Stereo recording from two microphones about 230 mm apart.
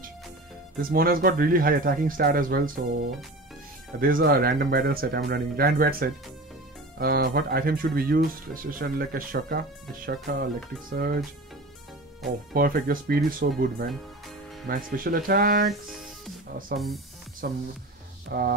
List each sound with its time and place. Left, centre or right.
0.7 s speech: right
4.0 s speech: right
12.5 s speech: right
15.7 s music: centre
16.7 s speech: centre
17.4 s speech: right
18.3 s a sound: right